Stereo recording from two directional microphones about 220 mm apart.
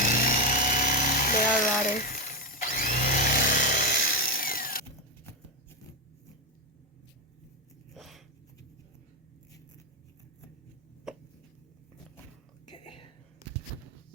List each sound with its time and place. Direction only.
0.0 s music: 40° left (ahead or behind)
1.9 s power tool: 40° left (ahead or behind)
7.9 s a sound: centre (ahead or behind)
12.6 s whispering: 20° left (ahead or behind)